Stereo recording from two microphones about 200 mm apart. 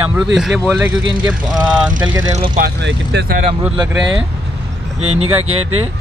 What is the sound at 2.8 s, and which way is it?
Speech, 60° right (ahead or behind).